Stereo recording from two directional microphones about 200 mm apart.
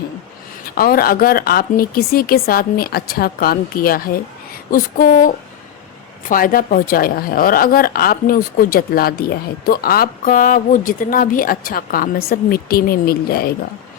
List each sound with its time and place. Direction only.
0.8 s a woman's voice: 50° left (ahead or behind)